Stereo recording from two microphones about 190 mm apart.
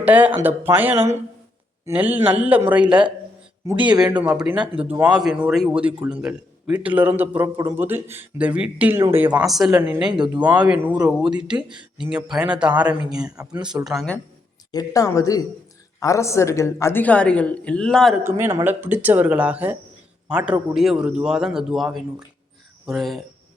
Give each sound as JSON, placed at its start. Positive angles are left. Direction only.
{"t": 0.0, "sound": "a man's voice", "side_deg": -10}
{"t": 13.3, "sound": "speech", "side_deg": -20}
{"t": 13.8, "sound": "a man's voice", "side_deg": 0}
{"t": 14.7, "sound": "a woman's voice", "side_deg": 20}
{"t": 18.2, "sound": "a man's voice", "side_deg": -10}